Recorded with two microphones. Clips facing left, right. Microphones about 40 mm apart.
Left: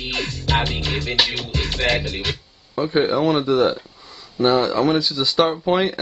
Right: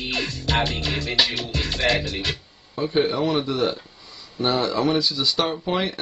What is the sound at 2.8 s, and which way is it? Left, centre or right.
Speech, centre.